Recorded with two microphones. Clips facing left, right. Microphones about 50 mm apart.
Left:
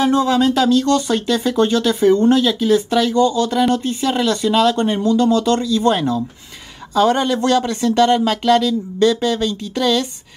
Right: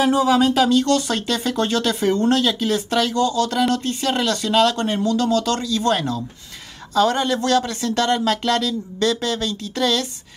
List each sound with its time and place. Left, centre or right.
0.0 s speech: centre